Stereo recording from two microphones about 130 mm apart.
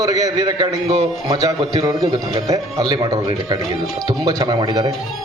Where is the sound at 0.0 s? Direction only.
25° right (ahead or behind).